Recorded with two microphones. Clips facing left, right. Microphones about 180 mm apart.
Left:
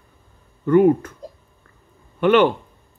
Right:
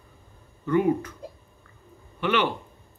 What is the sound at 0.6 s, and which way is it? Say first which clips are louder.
Speech: left 8 dB; 50° left (ahead or behind).